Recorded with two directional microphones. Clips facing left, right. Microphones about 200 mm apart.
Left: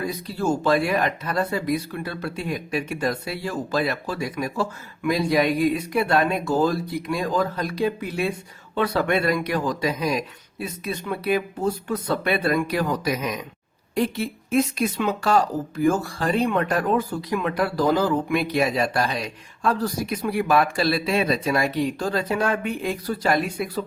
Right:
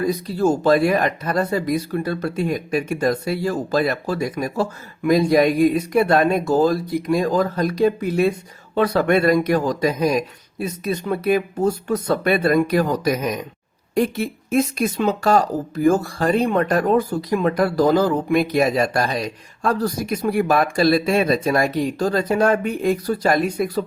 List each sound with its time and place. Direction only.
0.0 s speech: 40° right (ahead or behind)